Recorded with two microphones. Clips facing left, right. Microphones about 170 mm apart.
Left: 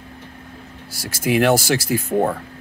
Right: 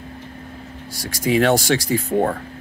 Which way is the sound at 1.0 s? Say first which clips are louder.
Even; 5° left (ahead or behind).